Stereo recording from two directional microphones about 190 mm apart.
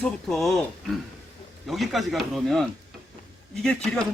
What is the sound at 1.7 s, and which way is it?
Speech, centre (ahead or behind).